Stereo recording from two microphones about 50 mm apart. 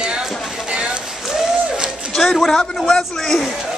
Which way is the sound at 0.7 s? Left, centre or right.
Centre.